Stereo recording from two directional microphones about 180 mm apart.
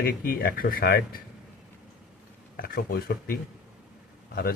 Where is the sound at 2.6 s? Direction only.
55° left (ahead or behind).